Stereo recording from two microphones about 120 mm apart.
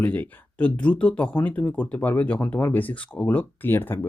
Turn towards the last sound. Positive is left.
turn(degrees=20)  # may be behind; listen again after turning